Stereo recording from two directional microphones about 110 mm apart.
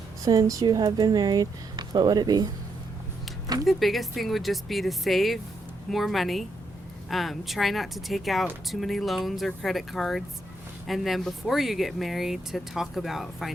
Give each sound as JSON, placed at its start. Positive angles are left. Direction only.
{"t": 0.3, "sound": "speech", "side_deg": -35}
{"t": 3.7, "sound": "speech", "side_deg": 0}